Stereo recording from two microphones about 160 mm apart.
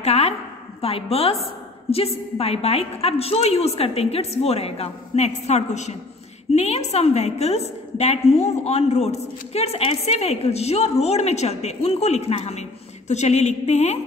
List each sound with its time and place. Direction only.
0.0 s a woman's voice: 40° left (ahead or behind)